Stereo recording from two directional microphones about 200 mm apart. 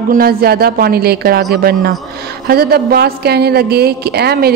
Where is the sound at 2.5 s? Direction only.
50° right (ahead or behind).